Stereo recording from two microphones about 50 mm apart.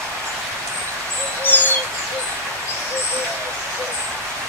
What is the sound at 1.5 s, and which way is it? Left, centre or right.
Bird, left.